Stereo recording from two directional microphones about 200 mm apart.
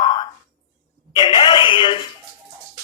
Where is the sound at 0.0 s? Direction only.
25° left (ahead or behind).